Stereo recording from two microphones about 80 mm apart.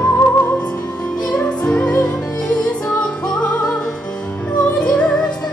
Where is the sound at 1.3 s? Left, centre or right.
Centre.